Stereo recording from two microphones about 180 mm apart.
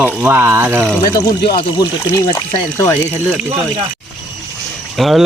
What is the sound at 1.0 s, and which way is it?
Speech, 25° left (ahead or behind).